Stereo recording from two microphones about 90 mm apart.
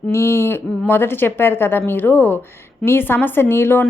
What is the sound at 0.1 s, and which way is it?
Speech, 30° left (ahead or behind).